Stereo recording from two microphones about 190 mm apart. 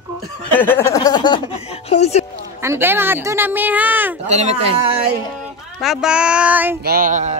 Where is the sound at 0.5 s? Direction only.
10° left (ahead or behind); by 2.2 s 35° left (ahead or behind).